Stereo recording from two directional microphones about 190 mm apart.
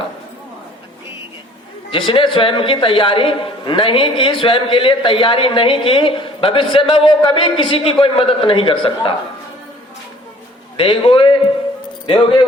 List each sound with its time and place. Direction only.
1.9 s a man's voice: 25° left (ahead or behind)
10.8 s a man's voice: 30° left (ahead or behind)